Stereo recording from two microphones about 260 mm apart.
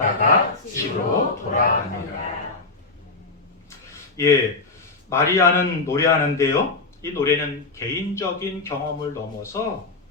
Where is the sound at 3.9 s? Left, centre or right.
Centre.